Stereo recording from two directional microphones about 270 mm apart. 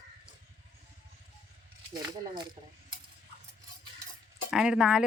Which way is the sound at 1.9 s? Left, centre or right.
Centre.